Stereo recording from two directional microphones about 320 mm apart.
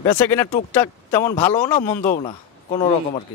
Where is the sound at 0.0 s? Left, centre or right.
Centre.